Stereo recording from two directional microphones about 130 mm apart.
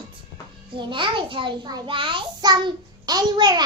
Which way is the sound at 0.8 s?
40° right (ahead or behind).